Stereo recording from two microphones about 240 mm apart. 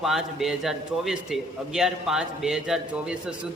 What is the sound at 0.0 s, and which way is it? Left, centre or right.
A man's voice, centre.